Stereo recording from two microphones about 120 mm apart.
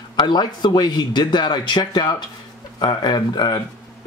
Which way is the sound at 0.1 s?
40° left (ahead or behind).